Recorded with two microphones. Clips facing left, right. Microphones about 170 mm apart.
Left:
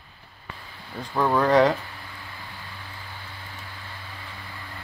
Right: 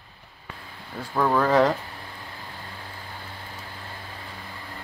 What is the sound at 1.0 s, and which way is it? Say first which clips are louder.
Speech: even; centre (ahead or behind).